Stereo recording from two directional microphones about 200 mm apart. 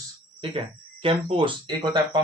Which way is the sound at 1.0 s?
25° right (ahead or behind).